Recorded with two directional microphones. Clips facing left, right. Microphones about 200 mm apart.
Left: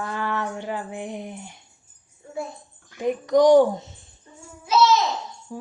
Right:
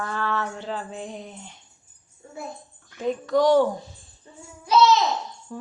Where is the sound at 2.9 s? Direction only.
15° left (ahead or behind).